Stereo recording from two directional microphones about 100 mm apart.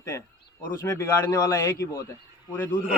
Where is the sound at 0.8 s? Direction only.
30° left (ahead or behind).